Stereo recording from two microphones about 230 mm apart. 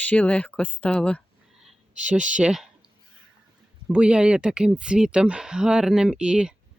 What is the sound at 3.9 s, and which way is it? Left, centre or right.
Speech, centre.